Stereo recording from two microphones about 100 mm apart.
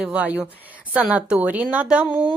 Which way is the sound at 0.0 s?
15° right (ahead or behind).